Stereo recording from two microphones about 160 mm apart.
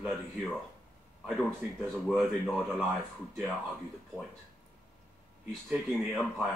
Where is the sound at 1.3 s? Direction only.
Centre (ahead or behind).